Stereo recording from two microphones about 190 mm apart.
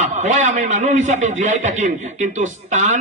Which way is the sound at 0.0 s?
40° right (ahead or behind).